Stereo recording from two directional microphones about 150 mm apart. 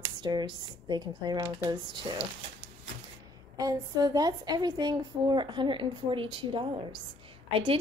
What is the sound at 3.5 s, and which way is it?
A woman's voice, 25° right (ahead or behind).